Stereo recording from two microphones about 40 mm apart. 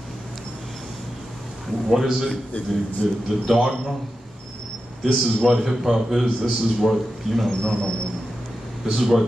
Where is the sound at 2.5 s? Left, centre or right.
Left.